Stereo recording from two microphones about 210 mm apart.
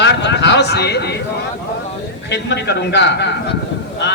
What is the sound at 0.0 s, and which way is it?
A man's voice, 55° left (ahead or behind).